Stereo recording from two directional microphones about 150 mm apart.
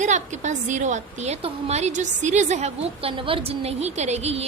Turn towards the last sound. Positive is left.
turn(degrees=-45)  # may be behind; listen again after turning